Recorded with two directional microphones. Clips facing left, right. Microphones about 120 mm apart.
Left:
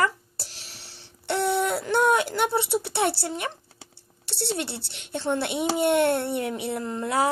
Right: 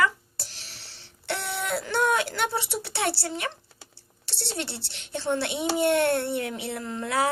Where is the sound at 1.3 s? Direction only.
25° left (ahead or behind).